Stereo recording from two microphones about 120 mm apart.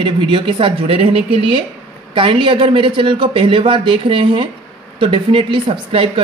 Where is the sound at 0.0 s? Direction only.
45° right (ahead or behind).